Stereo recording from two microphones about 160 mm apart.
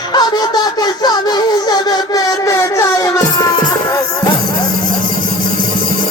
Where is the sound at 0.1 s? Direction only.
25° left (ahead or behind).